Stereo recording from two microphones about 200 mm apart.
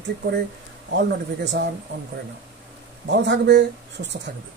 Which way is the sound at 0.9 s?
60° right (ahead or behind).